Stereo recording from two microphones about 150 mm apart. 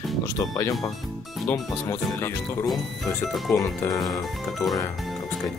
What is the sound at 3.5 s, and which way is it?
Speech, 20° left (ahead or behind).